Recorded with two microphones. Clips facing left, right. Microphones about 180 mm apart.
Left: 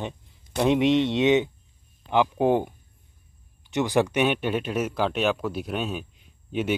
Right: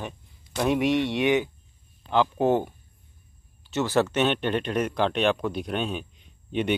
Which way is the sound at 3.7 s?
15° left (ahead or behind).